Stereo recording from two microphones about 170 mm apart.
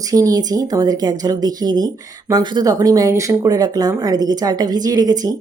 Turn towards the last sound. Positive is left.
turn(degrees=-20)  # may be behind; listen again after turning